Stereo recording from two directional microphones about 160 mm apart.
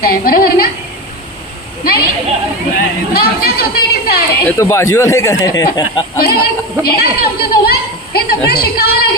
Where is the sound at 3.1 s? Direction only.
70° left (ahead or behind).